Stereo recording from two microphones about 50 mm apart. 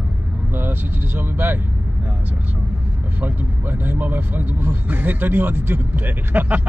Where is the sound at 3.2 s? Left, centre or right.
Right.